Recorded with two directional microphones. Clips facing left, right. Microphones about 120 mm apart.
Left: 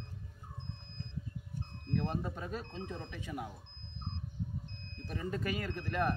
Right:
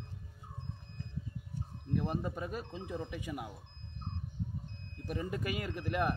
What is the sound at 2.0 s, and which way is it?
Speech, 10° right (ahead or behind).